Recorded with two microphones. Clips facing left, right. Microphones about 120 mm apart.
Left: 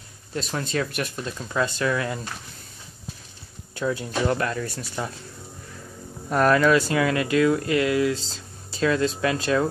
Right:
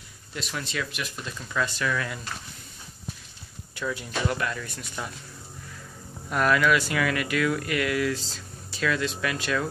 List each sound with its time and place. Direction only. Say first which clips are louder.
0.3 s speech: left 6 dB; 35° left (ahead or behind)
1.4 s speech: left 4 dB; 30° left (ahead or behind)
3.7 s speech: left 5 dB; 35° left (ahead or behind)
6.3 s speech: left 4 dB; 35° left (ahead or behind)